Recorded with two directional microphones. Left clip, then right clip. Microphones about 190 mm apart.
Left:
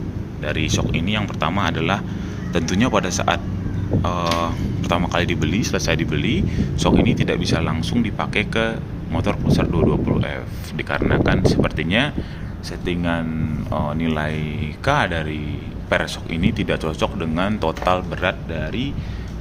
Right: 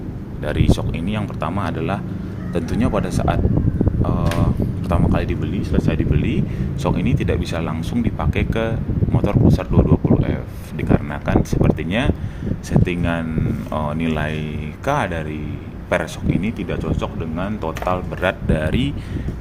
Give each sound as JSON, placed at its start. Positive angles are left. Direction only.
{"t": 0.4, "sound": "speech", "side_deg": -15}
{"t": 5.5, "sound": "speech", "side_deg": 20}
{"t": 16.6, "sound": "speech", "side_deg": 15}
{"t": 18.4, "sound": "speech", "side_deg": -30}